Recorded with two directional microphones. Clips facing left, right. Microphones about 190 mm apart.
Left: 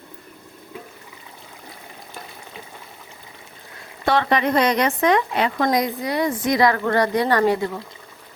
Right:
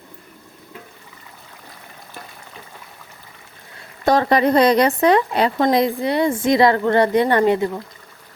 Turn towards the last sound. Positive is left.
turn(degrees=-20)  # may be behind; listen again after turning